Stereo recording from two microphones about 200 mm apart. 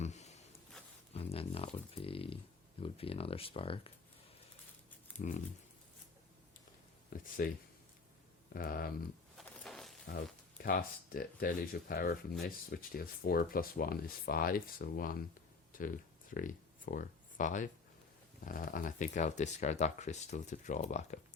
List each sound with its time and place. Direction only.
0.0 s a sound: 35° left (ahead or behind)
1.1 s speech: 30° left (ahead or behind)
5.2 s speech: 40° left (ahead or behind)
7.1 s speech: 45° left (ahead or behind)
8.5 s speech: 50° left (ahead or behind)
9.4 s a sound: centre (ahead or behind)
10.6 s speech: 45° left (ahead or behind)